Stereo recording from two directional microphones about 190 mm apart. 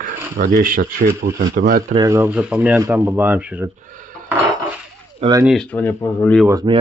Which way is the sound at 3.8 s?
45° right (ahead or behind).